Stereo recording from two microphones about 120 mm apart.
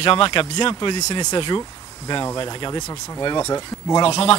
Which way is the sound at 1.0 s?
35° left (ahead or behind).